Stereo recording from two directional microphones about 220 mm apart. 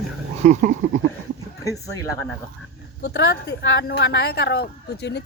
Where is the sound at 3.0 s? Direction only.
50° left (ahead or behind).